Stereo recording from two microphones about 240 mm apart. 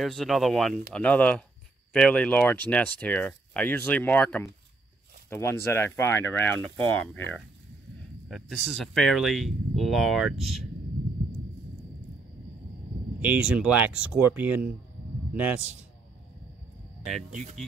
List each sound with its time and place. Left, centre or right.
0.0 s speech: centre
13.2 s speech: centre
17.3 s speech: right